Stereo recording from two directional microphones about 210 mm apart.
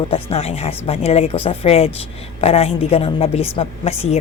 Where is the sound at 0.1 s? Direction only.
30° left (ahead or behind).